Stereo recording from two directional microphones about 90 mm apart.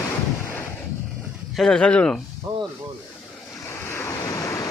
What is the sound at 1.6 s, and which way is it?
Speech, 5° left (ahead or behind).